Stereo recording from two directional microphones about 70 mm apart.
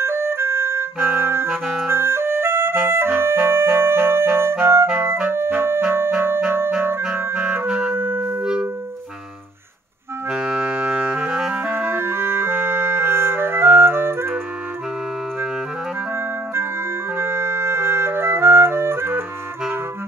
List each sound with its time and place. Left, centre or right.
0.0 s clarinet: right
1.9 s music: right
4.9 s clarinet: right
5.3 s music: right
7.2 s clarinet: right
7.9 s music: right
10.3 s music: centre
11.6 s clarinet: right
17.2 s clarinet: right